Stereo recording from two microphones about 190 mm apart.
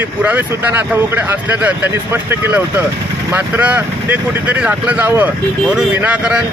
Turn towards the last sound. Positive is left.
turn(degrees=-5)  # may be behind; listen again after turning